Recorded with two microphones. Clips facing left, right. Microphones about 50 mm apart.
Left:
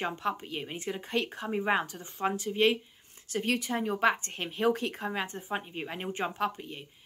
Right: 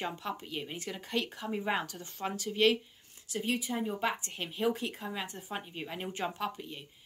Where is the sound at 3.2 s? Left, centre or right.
Left.